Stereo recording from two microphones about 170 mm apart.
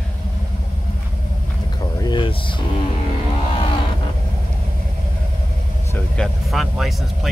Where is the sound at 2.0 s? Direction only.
30° left (ahead or behind).